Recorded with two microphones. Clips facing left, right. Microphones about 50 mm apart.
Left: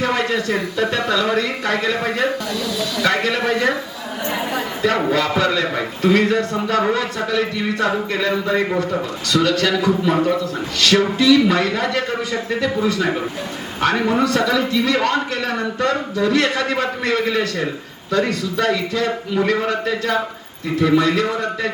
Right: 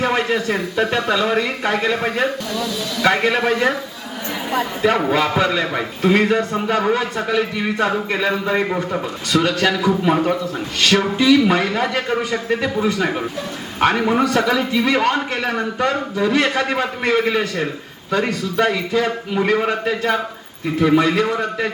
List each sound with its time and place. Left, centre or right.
0.0 s a man's voice: centre
4.8 s a man's voice: centre